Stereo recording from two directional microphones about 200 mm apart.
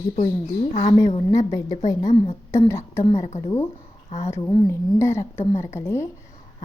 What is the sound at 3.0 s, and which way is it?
Speech, 30° left (ahead or behind).